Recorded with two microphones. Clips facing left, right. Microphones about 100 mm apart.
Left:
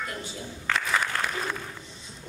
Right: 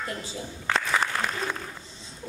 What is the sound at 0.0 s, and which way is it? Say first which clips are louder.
Speech: right 1 dB; 30° right (ahead or behind).